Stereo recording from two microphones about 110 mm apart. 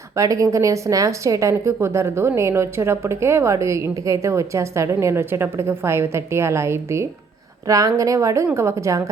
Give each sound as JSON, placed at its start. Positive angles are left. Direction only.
{"t": 0.2, "sound": "a woman's voice", "side_deg": -30}